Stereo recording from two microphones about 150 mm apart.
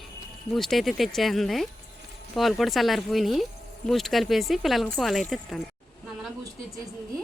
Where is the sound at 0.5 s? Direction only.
Centre (ahead or behind).